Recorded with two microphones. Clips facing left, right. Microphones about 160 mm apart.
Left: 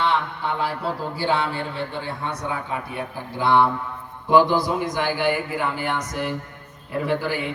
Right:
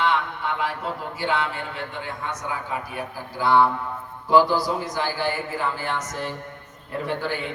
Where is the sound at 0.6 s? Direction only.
35° left (ahead or behind); by 7.4 s 10° left (ahead or behind).